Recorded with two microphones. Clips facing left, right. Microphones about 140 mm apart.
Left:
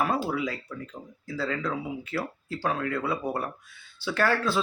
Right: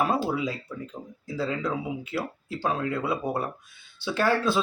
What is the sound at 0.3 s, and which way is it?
Speech, 20° right (ahead or behind).